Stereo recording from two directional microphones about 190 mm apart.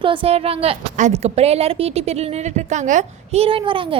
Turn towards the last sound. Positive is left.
turn(degrees=-25)  # may be behind; listen again after turning